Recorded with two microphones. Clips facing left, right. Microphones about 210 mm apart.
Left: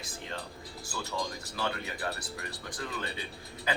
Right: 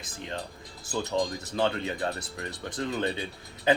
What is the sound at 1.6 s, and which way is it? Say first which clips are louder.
Speech: right 7 dB; 25° right (ahead or behind).